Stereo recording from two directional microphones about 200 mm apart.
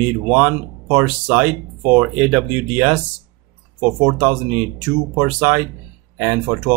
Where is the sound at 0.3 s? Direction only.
10° right (ahead or behind).